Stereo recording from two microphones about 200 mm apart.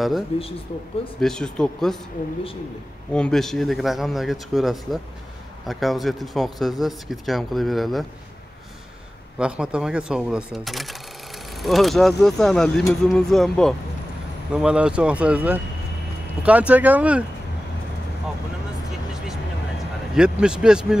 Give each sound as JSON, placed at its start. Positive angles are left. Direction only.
{"t": 0.3, "sound": "speech", "side_deg": 30}
{"t": 1.2, "sound": "speech", "side_deg": 5}
{"t": 3.1, "sound": "speech", "side_deg": 5}
{"t": 9.4, "sound": "speech", "side_deg": -5}
{"t": 20.2, "sound": "speech", "side_deg": -5}